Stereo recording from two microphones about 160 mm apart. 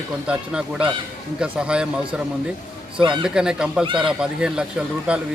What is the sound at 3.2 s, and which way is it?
A man's voice, 5° right (ahead or behind).